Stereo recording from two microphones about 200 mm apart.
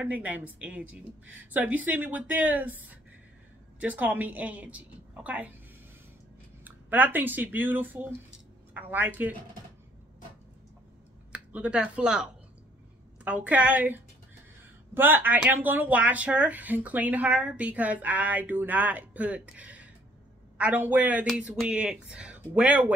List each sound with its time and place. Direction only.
0.0 s speech: 10° right (ahead or behind)
6.6 s speech: 10° right (ahead or behind)
11.3 s speech: 5° right (ahead or behind)